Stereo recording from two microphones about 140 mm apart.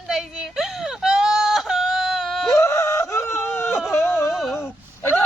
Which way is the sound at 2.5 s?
20° left (ahead or behind).